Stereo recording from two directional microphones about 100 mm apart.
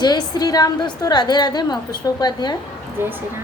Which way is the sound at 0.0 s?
40° left (ahead or behind).